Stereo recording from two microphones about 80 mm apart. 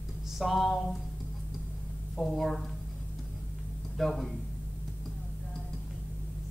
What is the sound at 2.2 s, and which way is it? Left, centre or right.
Speech, centre.